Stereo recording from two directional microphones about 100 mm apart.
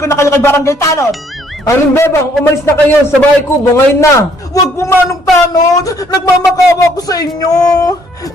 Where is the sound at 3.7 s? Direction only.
30° left (ahead or behind).